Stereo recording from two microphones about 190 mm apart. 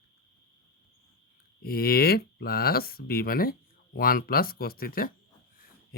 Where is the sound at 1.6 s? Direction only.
55° left (ahead or behind).